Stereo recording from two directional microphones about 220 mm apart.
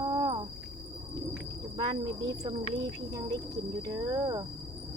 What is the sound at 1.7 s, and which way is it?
Speech, 25° right (ahead or behind).